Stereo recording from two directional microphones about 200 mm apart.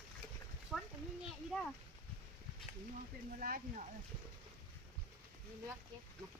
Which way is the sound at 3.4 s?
45° right (ahead or behind).